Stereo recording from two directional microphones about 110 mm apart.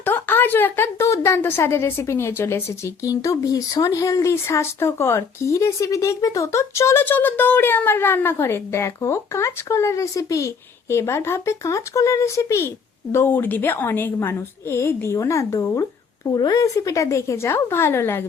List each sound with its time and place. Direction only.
0.0 s a woman's voice: 20° left (ahead or behind)